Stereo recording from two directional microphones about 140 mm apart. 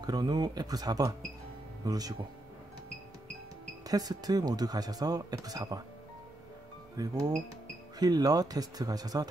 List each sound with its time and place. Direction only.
0.0 s speech: 30° right (ahead or behind)
3.8 s speech: 25° right (ahead or behind)
7.0 s speech: 25° right (ahead or behind)